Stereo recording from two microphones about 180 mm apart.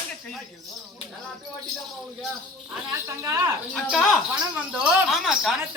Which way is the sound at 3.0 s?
15° right (ahead or behind).